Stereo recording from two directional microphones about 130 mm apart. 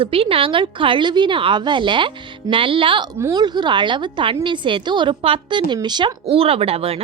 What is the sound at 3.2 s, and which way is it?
A woman's voice, 30° right (ahead or behind).